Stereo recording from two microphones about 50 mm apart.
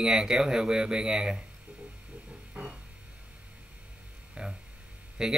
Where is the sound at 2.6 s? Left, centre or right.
Right.